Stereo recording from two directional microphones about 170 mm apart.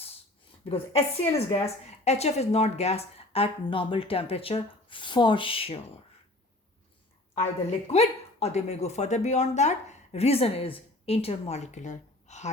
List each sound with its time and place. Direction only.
0.7 s speech: 35° left (ahead or behind)
7.3 s speech: 40° left (ahead or behind)